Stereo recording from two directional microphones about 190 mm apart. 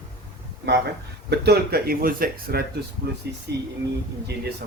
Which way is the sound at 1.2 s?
60° right (ahead or behind).